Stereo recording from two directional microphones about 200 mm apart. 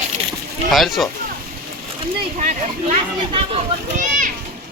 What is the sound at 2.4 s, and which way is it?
Speech, 35° right (ahead or behind).